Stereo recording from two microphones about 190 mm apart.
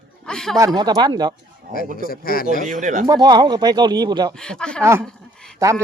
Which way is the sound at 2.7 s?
45° right (ahead or behind).